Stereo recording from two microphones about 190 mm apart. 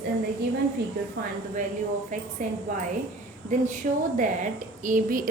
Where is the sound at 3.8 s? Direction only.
45° right (ahead or behind).